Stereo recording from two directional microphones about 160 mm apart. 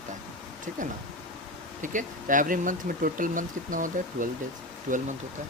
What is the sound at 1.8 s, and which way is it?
Speech, 55° right (ahead or behind).